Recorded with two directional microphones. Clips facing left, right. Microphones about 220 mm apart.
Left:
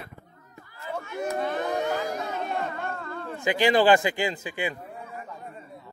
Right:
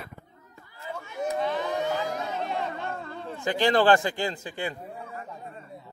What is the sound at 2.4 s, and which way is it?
Chatter, 50° left (ahead or behind).